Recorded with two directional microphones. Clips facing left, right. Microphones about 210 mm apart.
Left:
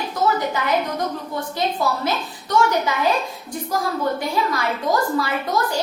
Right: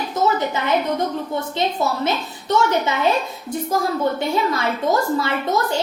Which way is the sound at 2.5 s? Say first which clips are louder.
Right 1 dB; 25° right (ahead or behind).